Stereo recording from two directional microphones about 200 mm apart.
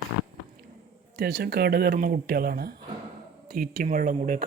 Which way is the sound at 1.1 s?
55° right (ahead or behind).